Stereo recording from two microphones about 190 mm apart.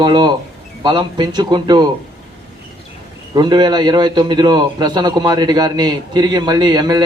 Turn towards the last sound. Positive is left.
turn(degrees=-20)  # may be behind; listen again after turning